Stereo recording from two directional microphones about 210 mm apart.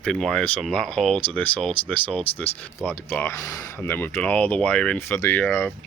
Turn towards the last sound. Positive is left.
turn(degrees=5)  # may be behind; listen again after turning